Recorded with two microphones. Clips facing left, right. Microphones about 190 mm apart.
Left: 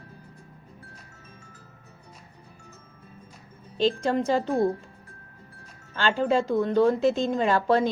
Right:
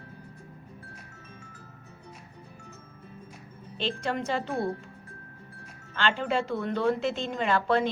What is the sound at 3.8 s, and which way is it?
Speech, 35° left (ahead or behind).